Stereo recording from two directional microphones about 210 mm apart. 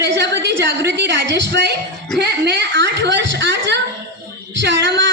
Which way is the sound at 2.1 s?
50° right (ahead or behind).